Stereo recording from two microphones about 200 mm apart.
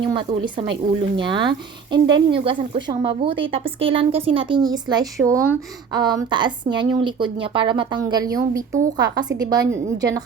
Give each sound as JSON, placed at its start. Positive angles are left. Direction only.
{"t": 0.0, "sound": "speech", "side_deg": -25}